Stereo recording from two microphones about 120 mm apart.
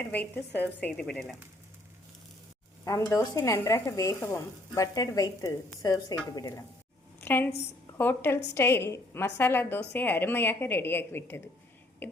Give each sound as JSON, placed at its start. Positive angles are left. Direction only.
{"t": 0.0, "sound": "a woman's voice", "side_deg": 15}
{"t": 2.8, "sound": "speech", "side_deg": 25}
{"t": 7.2, "sound": "a woman's voice", "side_deg": 15}